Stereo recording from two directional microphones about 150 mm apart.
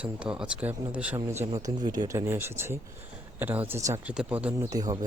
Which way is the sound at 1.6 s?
25° right (ahead or behind).